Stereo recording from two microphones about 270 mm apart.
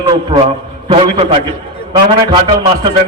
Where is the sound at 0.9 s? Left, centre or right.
Right.